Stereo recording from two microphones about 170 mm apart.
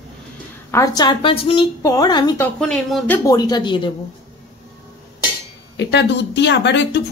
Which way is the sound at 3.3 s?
25° left (ahead or behind).